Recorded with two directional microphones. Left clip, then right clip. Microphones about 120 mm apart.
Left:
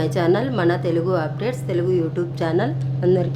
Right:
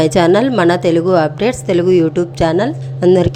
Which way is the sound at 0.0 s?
70° right (ahead or behind).